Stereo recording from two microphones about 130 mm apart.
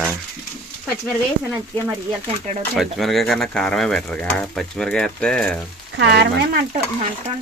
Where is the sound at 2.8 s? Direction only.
Centre (ahead or behind).